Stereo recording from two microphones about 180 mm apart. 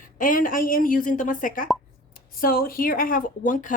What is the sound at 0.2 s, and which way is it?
Speech, 50° left (ahead or behind).